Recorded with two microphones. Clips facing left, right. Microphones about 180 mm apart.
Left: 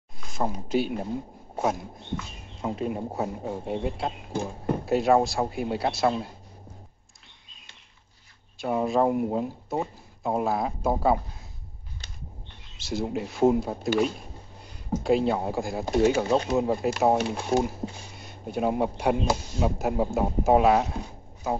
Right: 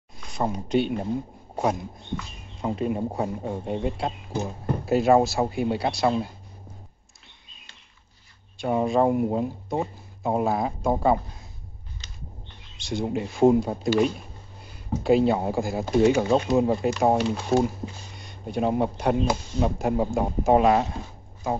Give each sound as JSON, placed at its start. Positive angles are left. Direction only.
{"t": 0.2, "sound": "speech", "side_deg": 0}
{"t": 8.5, "sound": "speech", "side_deg": 0}
{"t": 12.7, "sound": "speech", "side_deg": 5}
{"t": 15.0, "sound": "speech", "side_deg": 0}
{"t": 16.3, "sound": "speech", "side_deg": -20}
{"t": 16.5, "sound": "speech", "side_deg": 0}